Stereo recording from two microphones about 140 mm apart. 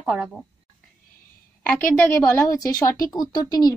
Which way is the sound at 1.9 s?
15° left (ahead or behind).